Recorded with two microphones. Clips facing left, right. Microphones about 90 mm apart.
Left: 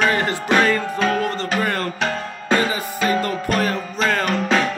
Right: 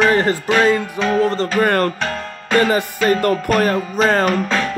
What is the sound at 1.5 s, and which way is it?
Music, 55° right (ahead or behind).